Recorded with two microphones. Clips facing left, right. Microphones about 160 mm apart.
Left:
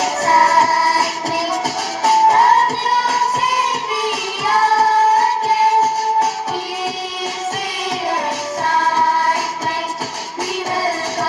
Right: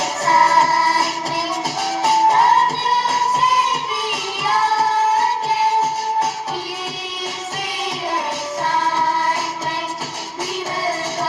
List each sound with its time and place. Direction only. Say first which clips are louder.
0.0 s music: left 2 dB; 40° left (ahead or behind)
2.0 s music: left 3 dB; 40° left (ahead or behind)
4.6 s music: left 4 dB; 40° left (ahead or behind)